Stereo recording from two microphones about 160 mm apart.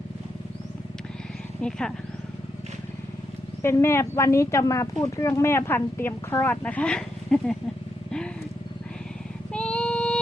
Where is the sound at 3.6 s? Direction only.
15° left (ahead or behind).